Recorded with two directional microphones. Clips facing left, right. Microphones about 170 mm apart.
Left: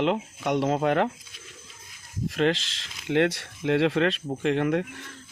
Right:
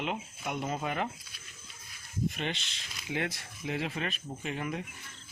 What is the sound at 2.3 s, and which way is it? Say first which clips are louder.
Speech: left 13 dB; 90° left.